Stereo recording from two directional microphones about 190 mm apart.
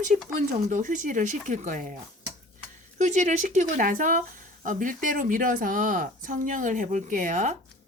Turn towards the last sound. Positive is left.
turn(degrees=-40)  # may be behind; listen again after turning